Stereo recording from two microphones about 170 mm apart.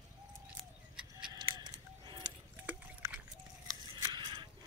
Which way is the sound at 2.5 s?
10° right (ahead or behind).